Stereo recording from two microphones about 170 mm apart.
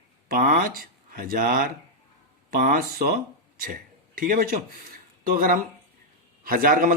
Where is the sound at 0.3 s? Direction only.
60° right (ahead or behind).